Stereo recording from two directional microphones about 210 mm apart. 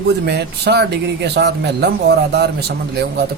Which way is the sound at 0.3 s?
50° right (ahead or behind).